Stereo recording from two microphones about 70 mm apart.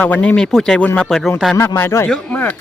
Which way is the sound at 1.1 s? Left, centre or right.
Centre.